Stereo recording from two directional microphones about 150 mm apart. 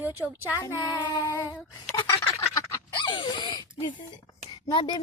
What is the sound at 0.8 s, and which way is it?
Child singing, 25° left (ahead or behind).